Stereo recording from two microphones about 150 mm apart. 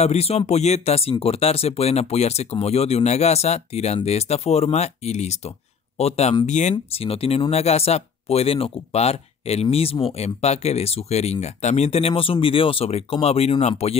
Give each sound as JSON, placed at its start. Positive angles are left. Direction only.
{"t": 0.0, "sound": "speech", "side_deg": 45}
{"t": 6.7, "sound": "speech", "side_deg": 40}